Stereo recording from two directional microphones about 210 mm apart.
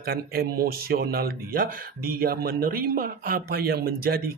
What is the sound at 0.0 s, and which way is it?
Speech, 45° right (ahead or behind).